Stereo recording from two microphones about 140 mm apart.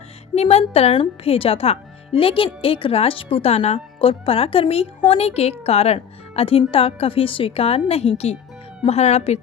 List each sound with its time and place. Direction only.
0.3 s speech: 50° left (ahead or behind)